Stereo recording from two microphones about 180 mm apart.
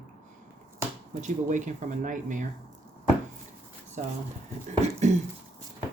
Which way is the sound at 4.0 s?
40° right (ahead or behind).